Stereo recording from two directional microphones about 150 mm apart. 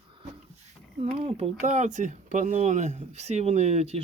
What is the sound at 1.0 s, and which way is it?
Speech, 40° right (ahead or behind).